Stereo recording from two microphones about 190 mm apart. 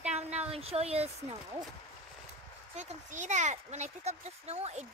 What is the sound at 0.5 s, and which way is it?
Speech, 30° right (ahead or behind).